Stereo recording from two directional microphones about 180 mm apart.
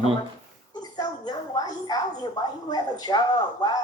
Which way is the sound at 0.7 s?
20° left (ahead or behind).